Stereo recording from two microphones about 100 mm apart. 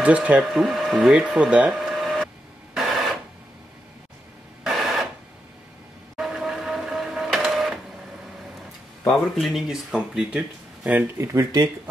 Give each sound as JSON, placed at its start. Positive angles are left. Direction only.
{"t": 0.0, "sound": "speech", "side_deg": -10}
{"t": 1.8, "sound": "printer", "side_deg": 0}
{"t": 4.6, "sound": "a sound", "side_deg": 0}
{"t": 6.1, "sound": "printer", "side_deg": -5}
{"t": 9.3, "sound": "speech", "side_deg": 0}
{"t": 11.1, "sound": "speech", "side_deg": -30}